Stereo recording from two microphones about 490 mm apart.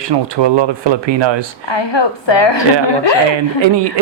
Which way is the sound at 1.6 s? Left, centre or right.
Left.